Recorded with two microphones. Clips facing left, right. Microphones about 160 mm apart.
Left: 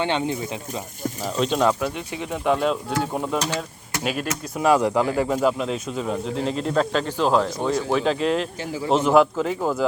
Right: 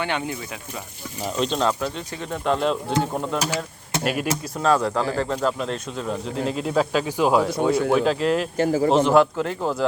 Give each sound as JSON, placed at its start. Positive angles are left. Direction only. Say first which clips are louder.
{"t": 0.0, "sound": "speech", "louder": "left 3 dB", "side_deg": 25}
{"t": 1.4, "sound": "speech", "louder": "left 2 dB", "side_deg": 10}
{"t": 4.5, "sound": "speech", "louder": "left 3 dB", "side_deg": 15}
{"t": 8.5, "sound": "a man's voice", "louder": "right 9 dB", "side_deg": -50}
{"t": 9.0, "sound": "speech", "louder": "even", "side_deg": 5}